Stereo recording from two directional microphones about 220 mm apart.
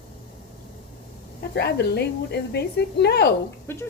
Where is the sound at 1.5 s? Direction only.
50° left (ahead or behind).